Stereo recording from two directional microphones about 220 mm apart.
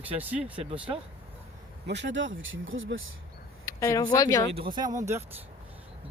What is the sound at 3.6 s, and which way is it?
Speech, 15° left (ahead or behind).